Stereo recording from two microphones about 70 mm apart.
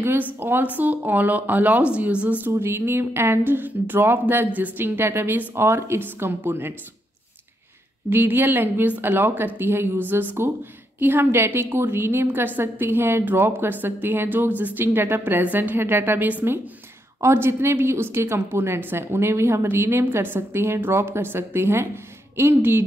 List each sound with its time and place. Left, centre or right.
0.0 s speech: right
2.5 s a woman's voice: right
8.1 s a woman's voice: right
17.2 s a woman's voice: right